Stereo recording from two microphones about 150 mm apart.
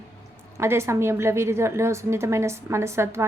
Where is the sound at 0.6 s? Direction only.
15° right (ahead or behind).